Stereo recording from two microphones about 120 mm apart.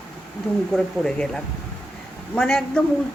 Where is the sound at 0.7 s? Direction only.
5° left (ahead or behind).